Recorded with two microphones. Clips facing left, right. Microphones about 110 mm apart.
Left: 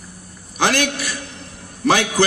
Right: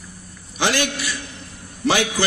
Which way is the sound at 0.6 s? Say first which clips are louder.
Left 2 dB; 50° left (ahead or behind).